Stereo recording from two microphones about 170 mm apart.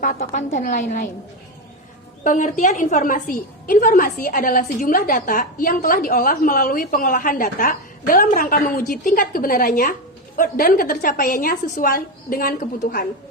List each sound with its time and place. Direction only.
0.0 s a woman's voice: 45° left (ahead or behind)
2.2 s a woman's voice: 50° left (ahead or behind)